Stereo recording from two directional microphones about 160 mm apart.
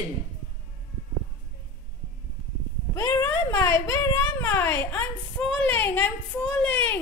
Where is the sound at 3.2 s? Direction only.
15° left (ahead or behind).